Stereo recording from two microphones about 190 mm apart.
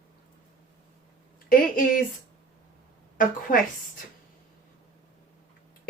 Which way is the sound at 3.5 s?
45° left (ahead or behind).